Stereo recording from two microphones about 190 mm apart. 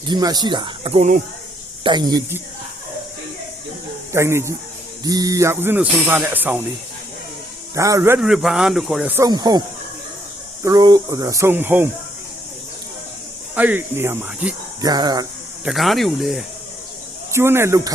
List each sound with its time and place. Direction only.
0.1 s speech: 20° right (ahead or behind); by 1.2 s 35° right (ahead or behind)
1.8 s speech: 25° right (ahead or behind)
4.1 s speech: 15° right (ahead or behind)
7.8 s speech: 15° right (ahead or behind)
8.2 s speech: centre (ahead or behind)
13.6 s speech: 10° right (ahead or behind)
15.6 s speech: centre (ahead or behind)
17.3 s speech: 15° right (ahead or behind)